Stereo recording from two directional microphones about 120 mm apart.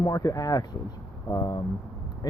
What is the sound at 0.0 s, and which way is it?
Speech, 30° left (ahead or behind).